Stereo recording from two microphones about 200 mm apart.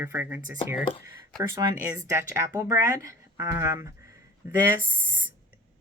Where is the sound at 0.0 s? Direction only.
10° right (ahead or behind).